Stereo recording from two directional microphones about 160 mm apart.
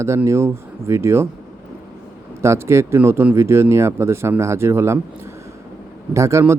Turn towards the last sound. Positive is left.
turn(degrees=-15)  # may be behind; listen again after turning